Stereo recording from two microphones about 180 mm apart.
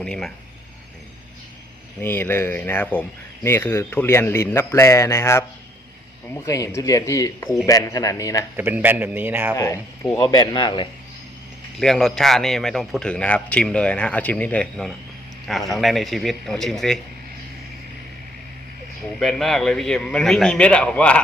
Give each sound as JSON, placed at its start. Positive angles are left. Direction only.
{"t": 0.0, "sound": "speech", "side_deg": 5}
{"t": 2.0, "sound": "a man's voice", "side_deg": 10}
{"t": 8.5, "sound": "a man's voice", "side_deg": -10}
{"t": 9.6, "sound": "a man's voice", "side_deg": 15}
{"t": 11.8, "sound": "a man's voice", "side_deg": 0}
{"t": 19.2, "sound": "a man's voice", "side_deg": 0}